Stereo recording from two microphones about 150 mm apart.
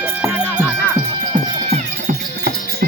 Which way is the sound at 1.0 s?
30° right (ahead or behind).